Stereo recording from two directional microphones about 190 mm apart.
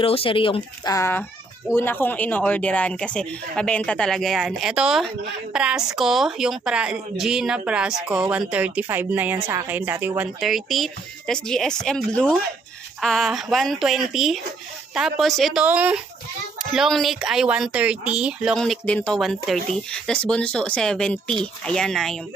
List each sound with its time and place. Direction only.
0.0 s speech: 30° left (ahead or behind)
0.9 s speech: 15° left (ahead or behind)